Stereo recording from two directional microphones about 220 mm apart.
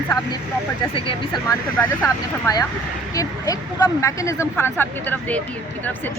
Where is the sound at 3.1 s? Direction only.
15° left (ahead or behind).